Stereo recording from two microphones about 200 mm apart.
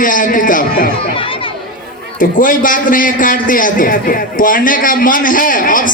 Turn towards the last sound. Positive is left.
turn(degrees=40)  # may be behind; listen again after turning